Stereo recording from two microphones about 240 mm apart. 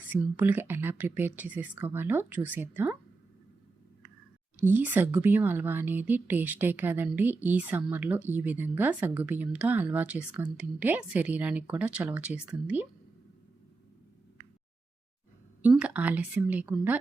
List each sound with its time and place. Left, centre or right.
0.1 s a woman's voice: centre
4.6 s a woman's voice: centre
15.6 s a woman's voice: centre